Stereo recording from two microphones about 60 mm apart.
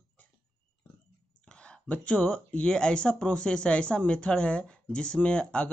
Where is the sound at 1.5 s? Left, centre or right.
Centre.